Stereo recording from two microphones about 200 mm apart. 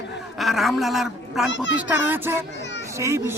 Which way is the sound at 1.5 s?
65° left (ahead or behind).